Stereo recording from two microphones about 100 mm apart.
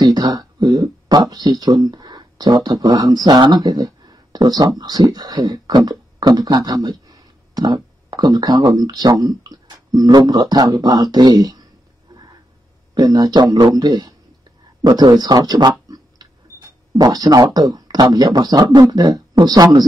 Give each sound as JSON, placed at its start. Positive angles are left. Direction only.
{"t": 0.0, "sound": "speech", "side_deg": -40}
{"t": 12.1, "sound": "a sound", "side_deg": -40}
{"t": 12.9, "sound": "speech", "side_deg": -40}